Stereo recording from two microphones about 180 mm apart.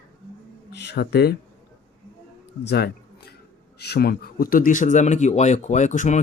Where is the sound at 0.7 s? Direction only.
70° left (ahead or behind).